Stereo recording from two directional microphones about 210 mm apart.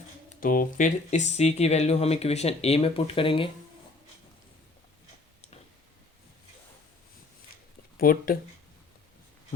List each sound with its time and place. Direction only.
0.3 s speech: 40° left (ahead or behind); by 3.5 s 25° left (ahead or behind)
7.9 s speech: 45° left (ahead or behind)